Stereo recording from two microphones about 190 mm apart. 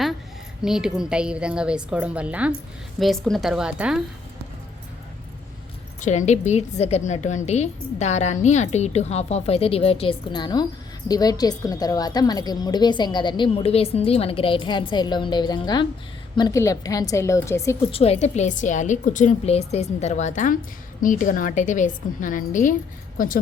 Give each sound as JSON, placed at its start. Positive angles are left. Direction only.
{"t": 0.6, "sound": "a woman's voice", "side_deg": -5}
{"t": 6.0, "sound": "a woman's voice", "side_deg": 40}
{"t": 17.9, "sound": "a woman's voice", "side_deg": 30}